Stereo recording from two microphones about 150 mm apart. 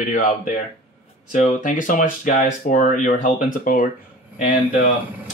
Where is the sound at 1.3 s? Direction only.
60° left (ahead or behind).